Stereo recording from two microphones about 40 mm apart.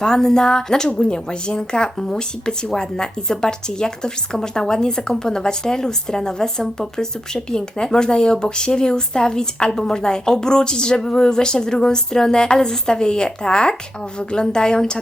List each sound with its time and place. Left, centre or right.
0.0 s a woman's voice: centre